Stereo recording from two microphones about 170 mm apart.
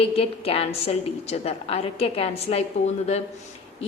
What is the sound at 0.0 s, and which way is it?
A woman's voice, 35° left (ahead or behind).